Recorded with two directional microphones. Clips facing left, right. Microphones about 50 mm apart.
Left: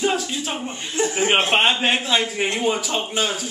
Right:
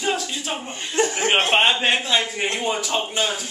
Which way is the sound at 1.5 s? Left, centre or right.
Centre.